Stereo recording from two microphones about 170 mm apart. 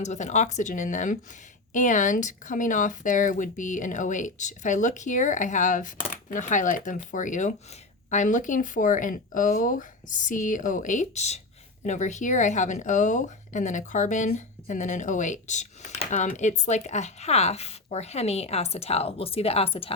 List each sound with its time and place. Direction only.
0.0 s speech: 45° left (ahead or behind)